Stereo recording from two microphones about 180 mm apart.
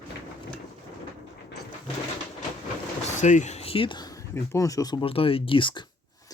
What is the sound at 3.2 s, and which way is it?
Speech, 45° left (ahead or behind).